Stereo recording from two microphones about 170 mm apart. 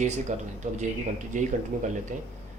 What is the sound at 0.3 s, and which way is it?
Speech, 45° right (ahead or behind).